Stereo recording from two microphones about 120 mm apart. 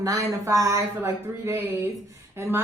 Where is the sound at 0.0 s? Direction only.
30° right (ahead or behind).